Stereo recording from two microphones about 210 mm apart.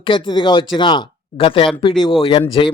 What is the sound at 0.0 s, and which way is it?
Speech, 25° left (ahead or behind).